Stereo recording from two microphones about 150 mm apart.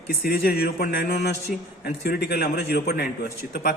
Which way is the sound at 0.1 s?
90° left.